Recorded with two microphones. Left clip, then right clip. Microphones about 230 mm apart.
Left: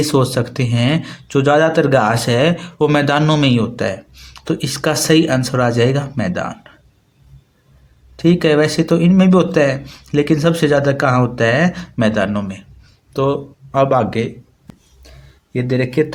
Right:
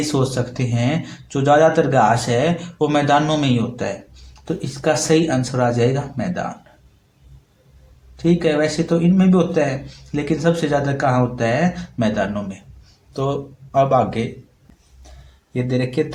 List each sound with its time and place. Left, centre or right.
0.0 s speech: left
8.1 s speech: left
14.7 s a sound: centre
15.5 s speech: left